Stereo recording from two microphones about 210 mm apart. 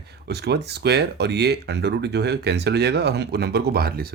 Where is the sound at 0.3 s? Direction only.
50° right (ahead or behind).